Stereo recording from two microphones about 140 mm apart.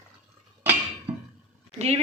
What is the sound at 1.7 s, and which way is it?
Speech, 45° right (ahead or behind).